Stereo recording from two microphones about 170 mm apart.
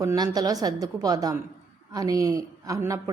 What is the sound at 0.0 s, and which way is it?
A woman's voice, 20° right (ahead or behind).